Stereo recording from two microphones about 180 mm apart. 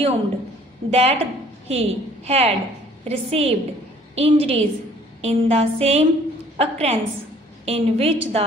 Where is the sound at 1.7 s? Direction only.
35° right (ahead or behind).